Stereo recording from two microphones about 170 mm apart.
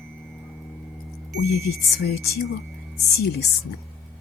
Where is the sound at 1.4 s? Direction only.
65° left (ahead or behind).